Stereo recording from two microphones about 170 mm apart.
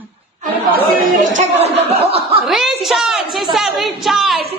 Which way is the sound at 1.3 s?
35° right (ahead or behind).